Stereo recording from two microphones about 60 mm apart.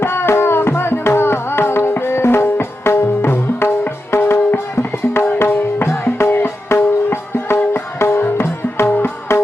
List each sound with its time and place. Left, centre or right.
0.0 s music: left